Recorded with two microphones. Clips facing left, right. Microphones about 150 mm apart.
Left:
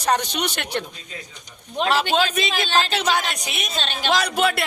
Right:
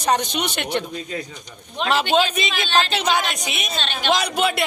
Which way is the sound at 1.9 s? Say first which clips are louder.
Right 2 dB; 10° left (ahead or behind).